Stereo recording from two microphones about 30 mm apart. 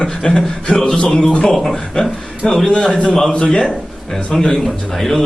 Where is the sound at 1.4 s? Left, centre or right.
Centre.